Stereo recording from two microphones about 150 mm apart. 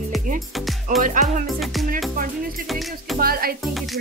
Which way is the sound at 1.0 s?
60° right (ahead or behind).